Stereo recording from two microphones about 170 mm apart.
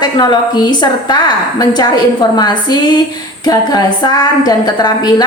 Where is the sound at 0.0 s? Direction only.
25° left (ahead or behind).